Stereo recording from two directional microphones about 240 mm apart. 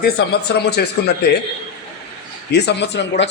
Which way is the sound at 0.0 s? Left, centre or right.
Left.